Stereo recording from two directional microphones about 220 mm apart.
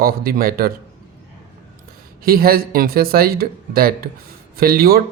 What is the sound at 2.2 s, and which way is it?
Speech, 45° right (ahead or behind).